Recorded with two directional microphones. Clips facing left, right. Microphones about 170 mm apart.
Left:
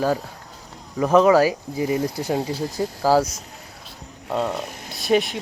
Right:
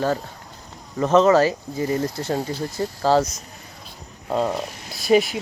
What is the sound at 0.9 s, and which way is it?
Speech, 10° left (ahead or behind).